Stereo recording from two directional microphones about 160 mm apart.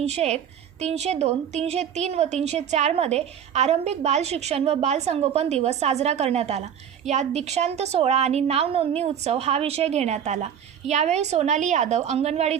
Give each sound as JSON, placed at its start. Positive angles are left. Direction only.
{"t": 0.0, "sound": "a woman's voice", "side_deg": -45}